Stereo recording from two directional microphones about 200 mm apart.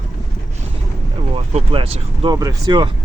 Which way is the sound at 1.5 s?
30° right (ahead or behind).